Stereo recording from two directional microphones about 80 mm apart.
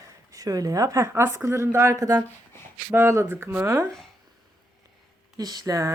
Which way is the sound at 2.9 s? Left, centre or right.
Right.